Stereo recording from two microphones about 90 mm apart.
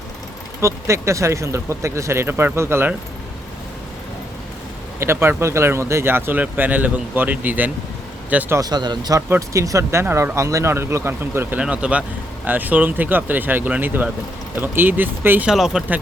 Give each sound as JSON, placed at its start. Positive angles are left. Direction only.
{"t": 0.6, "sound": "speech", "side_deg": -35}
{"t": 4.9, "sound": "speech", "side_deg": -30}
{"t": 8.6, "sound": "speech", "side_deg": -50}
{"t": 9.3, "sound": "speech", "side_deg": -35}
{"t": 11.5, "sound": "speech", "side_deg": -15}
{"t": 15.4, "sound": "speech", "side_deg": -5}